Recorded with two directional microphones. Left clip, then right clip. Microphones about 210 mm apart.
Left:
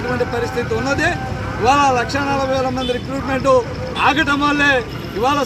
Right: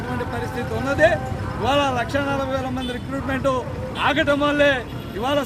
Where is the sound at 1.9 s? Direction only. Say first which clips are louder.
Left 5 dB; 10° right (ahead or behind).